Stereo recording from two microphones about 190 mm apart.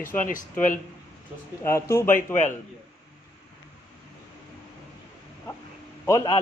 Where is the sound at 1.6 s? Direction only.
15° left (ahead or behind).